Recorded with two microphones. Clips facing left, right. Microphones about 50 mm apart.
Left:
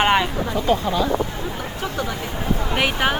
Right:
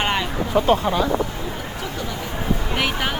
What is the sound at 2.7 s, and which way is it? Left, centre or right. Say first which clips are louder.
Speech: left 5 dB; centre.